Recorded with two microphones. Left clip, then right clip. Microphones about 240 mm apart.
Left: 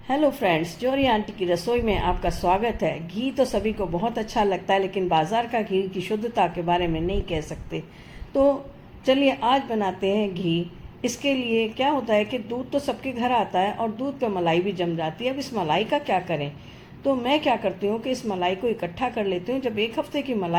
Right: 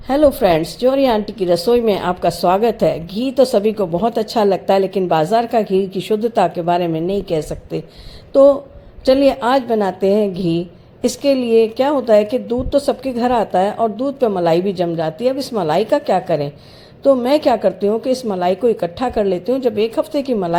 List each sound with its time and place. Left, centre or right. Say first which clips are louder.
0.1 s a woman's voice: right 9 dB; right